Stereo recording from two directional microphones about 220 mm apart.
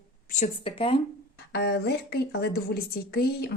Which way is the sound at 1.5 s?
45° left (ahead or behind).